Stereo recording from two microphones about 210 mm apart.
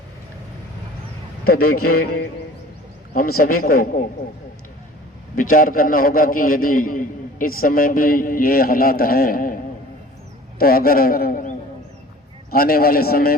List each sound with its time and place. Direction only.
1.5 s a man's voice: 45° left (ahead or behind)
2.0 s a man's voice: 90° left
3.2 s a man's voice: 45° left (ahead or behind)
5.4 s a man's voice: 40° left (ahead or behind)
10.6 s a man's voice: 45° left (ahead or behind)